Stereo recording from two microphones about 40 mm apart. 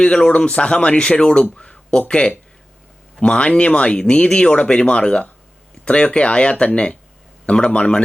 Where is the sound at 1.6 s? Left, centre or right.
Left.